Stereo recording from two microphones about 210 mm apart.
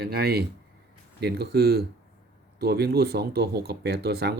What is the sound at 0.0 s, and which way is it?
Speech, 50° right (ahead or behind).